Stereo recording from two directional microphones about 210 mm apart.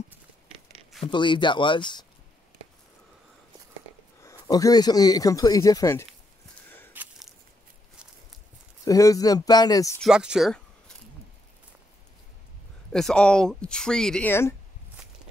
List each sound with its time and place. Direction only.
1.0 s speech: 20° left (ahead or behind)
4.2 s speech: 15° left (ahead or behind)
6.9 s biting: 10° right (ahead or behind)
8.8 s speech: 15° left (ahead or behind)
10.0 s speech: 5° right (ahead or behind)
12.9 s speech: 5° left (ahead or behind)